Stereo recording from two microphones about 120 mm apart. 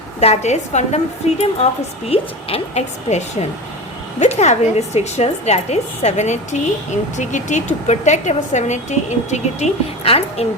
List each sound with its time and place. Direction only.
0.2 s a woman's voice: 65° left (ahead or behind)
7.2 s speech: 90° left; by 10.4 s 55° left (ahead or behind)